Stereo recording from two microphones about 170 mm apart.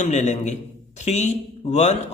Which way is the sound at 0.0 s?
45° left (ahead or behind).